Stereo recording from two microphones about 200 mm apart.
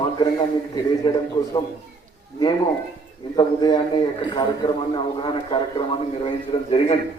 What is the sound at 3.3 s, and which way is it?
A man's voice, 20° left (ahead or behind).